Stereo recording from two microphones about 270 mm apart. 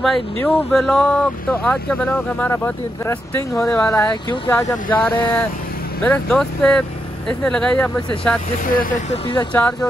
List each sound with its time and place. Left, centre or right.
0.0 s speech: centre
8.6 s speech: left
9.5 s speech: centre